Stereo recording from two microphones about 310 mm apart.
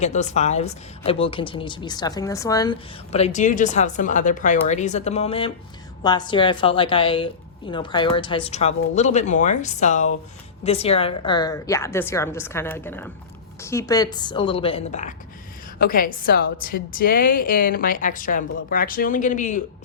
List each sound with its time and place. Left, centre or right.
0.0 s a woman's voice: left